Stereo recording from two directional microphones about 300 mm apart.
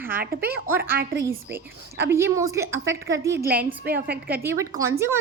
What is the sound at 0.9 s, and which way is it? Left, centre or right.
Speech, right.